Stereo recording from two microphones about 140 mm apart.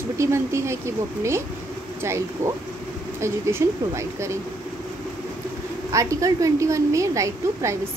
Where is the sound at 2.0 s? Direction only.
20° right (ahead or behind).